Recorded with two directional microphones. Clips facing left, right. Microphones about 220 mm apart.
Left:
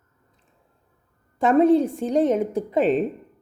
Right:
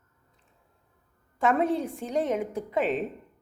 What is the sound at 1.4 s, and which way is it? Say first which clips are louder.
Speech: left 7 dB; 35° left (ahead or behind).